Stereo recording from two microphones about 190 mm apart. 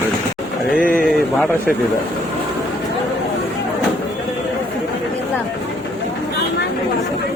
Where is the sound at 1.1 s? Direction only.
5° left (ahead or behind).